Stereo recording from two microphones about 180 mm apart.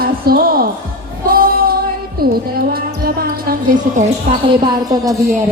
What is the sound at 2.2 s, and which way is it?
Music, 55° right (ahead or behind).